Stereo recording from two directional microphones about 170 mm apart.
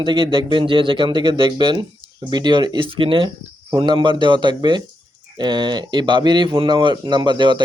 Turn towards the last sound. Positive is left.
turn(degrees=-25)  # may be behind; listen again after turning